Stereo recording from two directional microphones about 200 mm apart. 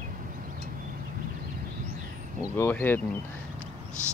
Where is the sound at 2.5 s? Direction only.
10° left (ahead or behind).